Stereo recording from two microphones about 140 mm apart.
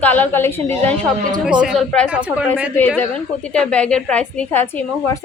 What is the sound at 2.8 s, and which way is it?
A woman's voice, 15° left (ahead or behind).